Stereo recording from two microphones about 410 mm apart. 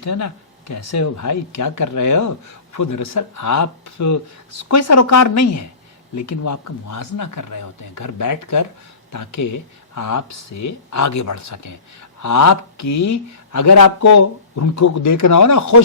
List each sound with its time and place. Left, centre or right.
0.0 s speech: left